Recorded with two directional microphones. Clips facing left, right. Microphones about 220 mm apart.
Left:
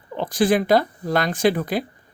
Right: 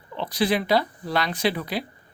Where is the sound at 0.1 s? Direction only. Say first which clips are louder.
Left 5 dB; 45° left (ahead or behind).